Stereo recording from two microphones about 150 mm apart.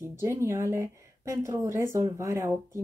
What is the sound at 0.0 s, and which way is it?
A woman's voice, 15° right (ahead or behind).